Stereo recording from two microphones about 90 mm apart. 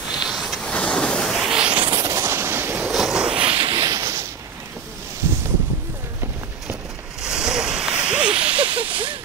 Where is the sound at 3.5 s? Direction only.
90° right.